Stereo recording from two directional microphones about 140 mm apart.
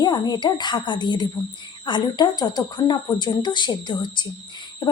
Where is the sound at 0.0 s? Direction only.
30° left (ahead or behind).